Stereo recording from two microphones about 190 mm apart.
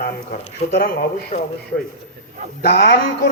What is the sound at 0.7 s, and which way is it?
Speech, 50° left (ahead or behind).